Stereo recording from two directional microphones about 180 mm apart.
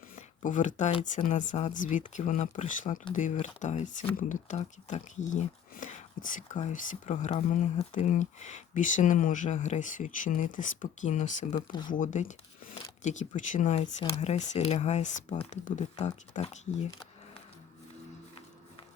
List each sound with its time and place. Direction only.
0.2 s a sound: 45° left (ahead or behind)
0.8 s speech: 40° left (ahead or behind)
1.3 s speech: 45° left (ahead or behind)